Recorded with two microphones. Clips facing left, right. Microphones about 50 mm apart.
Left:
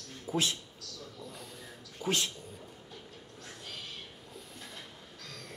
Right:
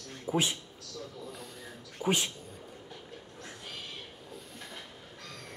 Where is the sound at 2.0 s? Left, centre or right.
Centre.